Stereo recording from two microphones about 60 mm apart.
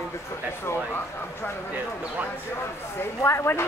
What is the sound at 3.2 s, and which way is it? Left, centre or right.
Speech, left.